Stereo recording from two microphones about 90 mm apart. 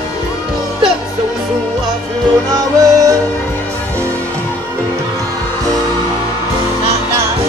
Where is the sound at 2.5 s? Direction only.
40° right (ahead or behind).